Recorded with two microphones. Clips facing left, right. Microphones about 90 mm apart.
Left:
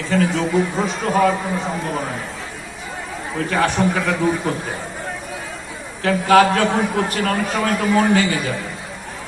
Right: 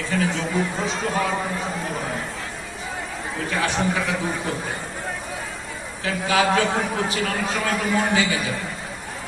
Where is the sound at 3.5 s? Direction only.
55° left (ahead or behind).